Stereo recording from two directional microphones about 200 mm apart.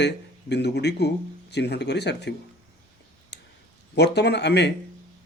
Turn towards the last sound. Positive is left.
turn(degrees=60)  # may be behind; listen again after turning